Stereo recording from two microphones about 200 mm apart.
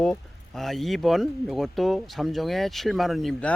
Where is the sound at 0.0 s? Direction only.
Centre (ahead or behind).